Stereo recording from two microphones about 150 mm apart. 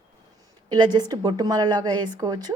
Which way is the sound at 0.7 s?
30° right (ahead or behind).